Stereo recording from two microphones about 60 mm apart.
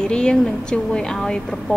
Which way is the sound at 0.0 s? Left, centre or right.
Centre.